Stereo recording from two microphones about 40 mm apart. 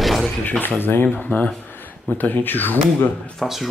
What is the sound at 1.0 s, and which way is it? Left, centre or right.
Speech, left.